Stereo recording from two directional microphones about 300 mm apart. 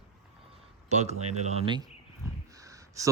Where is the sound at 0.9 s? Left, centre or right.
Right.